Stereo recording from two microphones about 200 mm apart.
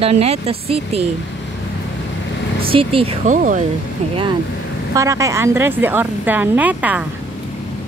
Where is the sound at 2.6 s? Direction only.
25° right (ahead or behind).